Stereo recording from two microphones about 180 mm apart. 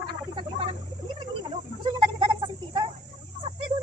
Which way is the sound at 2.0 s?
25° right (ahead or behind).